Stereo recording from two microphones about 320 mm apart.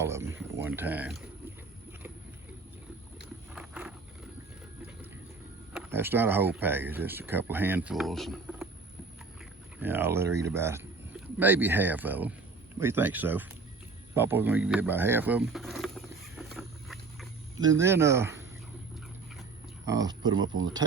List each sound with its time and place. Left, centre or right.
0.0 s speech: centre
3.5 s a sound: centre
5.7 s speech: centre
9.8 s speech: centre
14.2 s a sound: centre
17.7 s speech: centre
19.8 s speech: centre
20.3 s speech: right